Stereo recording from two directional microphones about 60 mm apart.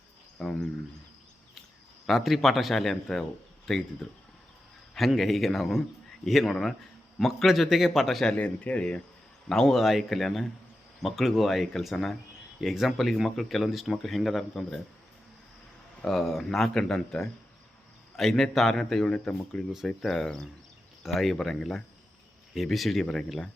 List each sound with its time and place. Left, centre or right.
0.3 s a sound: centre
2.0 s speech: centre
8.2 s speech: centre
9.5 s speech: centre
16.0 s speech: centre
21.0 s speech: centre